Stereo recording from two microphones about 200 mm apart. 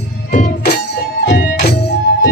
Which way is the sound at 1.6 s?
55° left (ahead or behind).